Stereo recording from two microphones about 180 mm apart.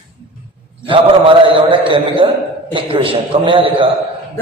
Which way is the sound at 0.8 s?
30° right (ahead or behind).